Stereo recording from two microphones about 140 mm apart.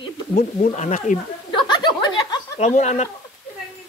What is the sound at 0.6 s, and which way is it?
Speech, 55° left (ahead or behind).